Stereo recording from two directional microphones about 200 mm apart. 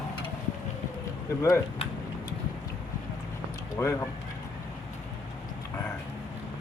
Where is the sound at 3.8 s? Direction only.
15° left (ahead or behind).